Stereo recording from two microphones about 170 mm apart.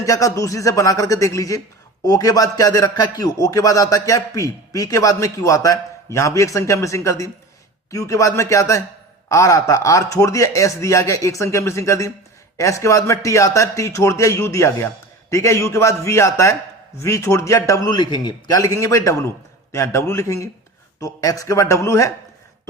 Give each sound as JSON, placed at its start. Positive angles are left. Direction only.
{"t": 0.0, "sound": "a man's voice", "side_deg": 20}